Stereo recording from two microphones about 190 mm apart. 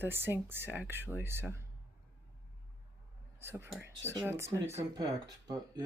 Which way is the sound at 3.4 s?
10° right (ahead or behind).